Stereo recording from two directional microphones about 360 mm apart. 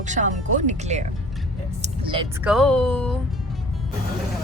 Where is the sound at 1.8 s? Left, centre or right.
Centre.